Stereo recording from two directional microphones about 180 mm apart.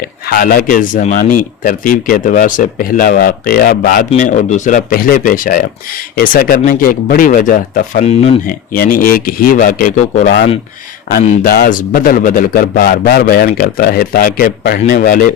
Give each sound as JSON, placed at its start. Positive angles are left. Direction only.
{"t": 0.3, "sound": "a man's voice", "side_deg": 50}
{"t": 8.0, "sound": "speech", "side_deg": 35}
{"t": 8.4, "sound": "a man's voice", "side_deg": 50}